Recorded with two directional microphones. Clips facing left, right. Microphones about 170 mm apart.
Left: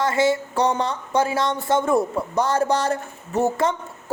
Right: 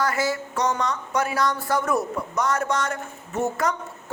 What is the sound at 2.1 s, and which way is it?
A woman's voice, 30° left (ahead or behind).